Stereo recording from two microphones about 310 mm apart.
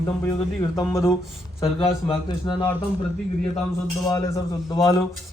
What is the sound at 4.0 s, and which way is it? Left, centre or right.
Speech, centre.